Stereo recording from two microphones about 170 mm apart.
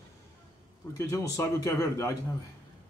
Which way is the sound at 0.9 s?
15° left (ahead or behind).